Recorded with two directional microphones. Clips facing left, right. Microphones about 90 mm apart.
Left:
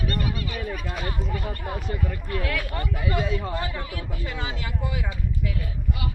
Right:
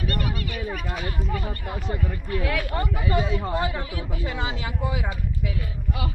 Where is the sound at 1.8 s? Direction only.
25° right (ahead or behind).